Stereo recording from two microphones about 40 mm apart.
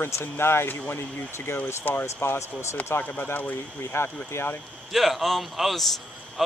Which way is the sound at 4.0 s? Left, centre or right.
Left.